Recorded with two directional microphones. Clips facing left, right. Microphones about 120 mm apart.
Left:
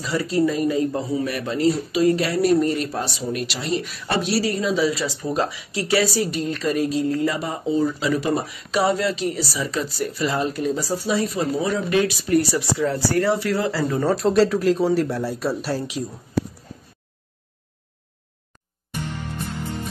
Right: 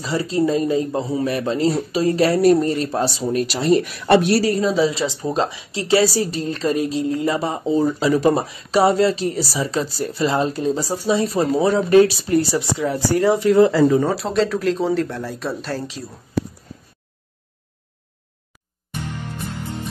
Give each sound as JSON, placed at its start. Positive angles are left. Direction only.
{"t": 0.0, "sound": "speech", "side_deg": -25}
{"t": 14.1, "sound": "speech", "side_deg": 0}